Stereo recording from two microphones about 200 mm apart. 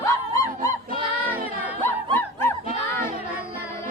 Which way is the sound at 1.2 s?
45° right (ahead or behind).